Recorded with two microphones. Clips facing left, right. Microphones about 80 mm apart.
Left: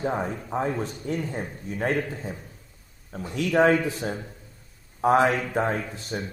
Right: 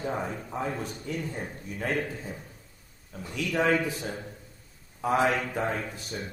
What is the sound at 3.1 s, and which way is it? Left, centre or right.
A man's voice, left.